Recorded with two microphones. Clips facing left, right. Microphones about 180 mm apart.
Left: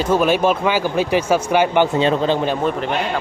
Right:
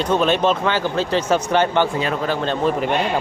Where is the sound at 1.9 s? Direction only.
25° left (ahead or behind).